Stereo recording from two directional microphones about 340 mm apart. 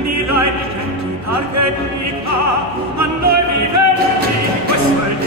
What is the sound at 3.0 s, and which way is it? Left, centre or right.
Music, right.